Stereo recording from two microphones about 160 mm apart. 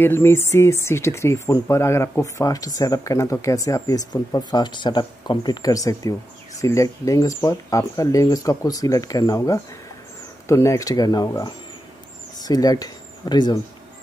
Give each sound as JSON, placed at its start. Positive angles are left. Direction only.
{"t": 0.0, "sound": "speech", "side_deg": 15}